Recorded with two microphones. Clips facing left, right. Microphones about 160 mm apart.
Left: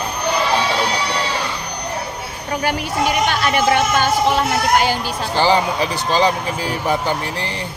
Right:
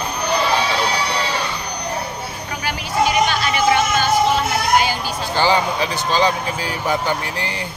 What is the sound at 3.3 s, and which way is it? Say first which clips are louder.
Speech: left 1 dB; 55° left (ahead or behind).